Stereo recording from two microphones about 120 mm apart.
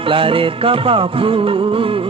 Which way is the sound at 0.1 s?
50° right (ahead or behind).